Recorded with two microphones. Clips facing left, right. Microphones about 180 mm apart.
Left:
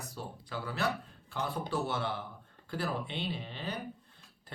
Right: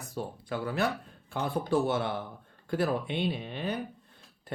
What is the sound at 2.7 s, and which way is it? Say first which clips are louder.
Speech: right 7 dB; 50° right (ahead or behind).